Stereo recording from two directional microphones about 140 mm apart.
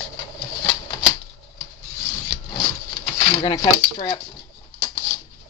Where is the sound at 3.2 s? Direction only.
30° left (ahead or behind).